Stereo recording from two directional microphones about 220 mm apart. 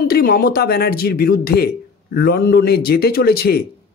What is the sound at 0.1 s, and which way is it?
Speech, 45° left (ahead or behind).